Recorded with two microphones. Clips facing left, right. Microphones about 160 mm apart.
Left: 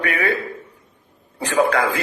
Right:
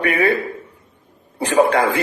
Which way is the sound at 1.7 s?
25° right (ahead or behind).